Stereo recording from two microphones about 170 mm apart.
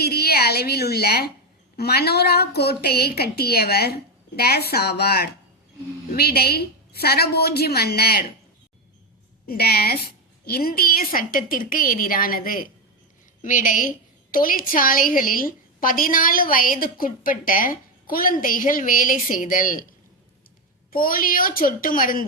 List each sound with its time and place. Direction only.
0.0 s a sound: 70° left (ahead or behind)
1.7 s a woman's voice: 70° left (ahead or behind)
9.5 s a woman's voice: 65° left (ahead or behind)
20.9 s a woman's voice: 55° left (ahead or behind)